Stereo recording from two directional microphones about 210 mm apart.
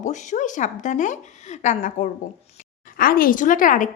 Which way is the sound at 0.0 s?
35° left (ahead or behind).